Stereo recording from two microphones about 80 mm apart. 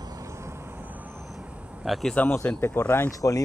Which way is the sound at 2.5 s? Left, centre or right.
Left.